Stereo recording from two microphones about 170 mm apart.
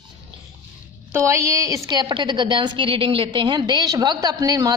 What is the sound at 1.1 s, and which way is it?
A woman's voice, 15° right (ahead or behind).